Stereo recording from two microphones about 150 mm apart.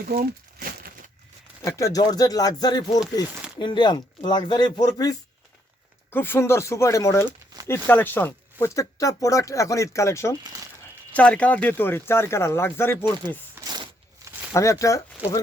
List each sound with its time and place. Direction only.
0.0 s crumpling: 75° right (ahead or behind)
1.6 s speech: 20° left (ahead or behind)
6.1 s speech: 15° left (ahead or behind)
7.3 s a sound: 25° right (ahead or behind)
7.7 s speech: 15° left (ahead or behind)
11.1 s speech: 10° left (ahead or behind)
13.6 s a sound: 15° right (ahead or behind)
14.5 s speech: 20° left (ahead or behind)